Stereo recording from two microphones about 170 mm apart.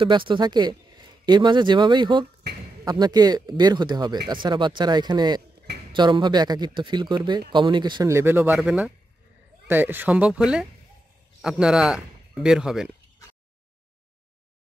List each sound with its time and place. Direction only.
0.0 s a man's voice: 30° right (ahead or behind); by 12.9 s 5° right (ahead or behind)